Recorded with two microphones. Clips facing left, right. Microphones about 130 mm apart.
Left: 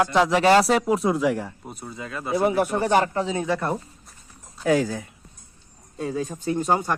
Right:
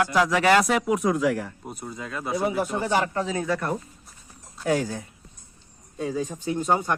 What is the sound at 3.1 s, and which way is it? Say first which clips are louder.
Speech: left 2 dB; 25° left (ahead or behind).